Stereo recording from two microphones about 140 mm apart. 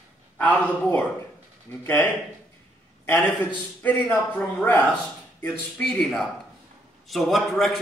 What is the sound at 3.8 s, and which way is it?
A man's voice, 10° left (ahead or behind).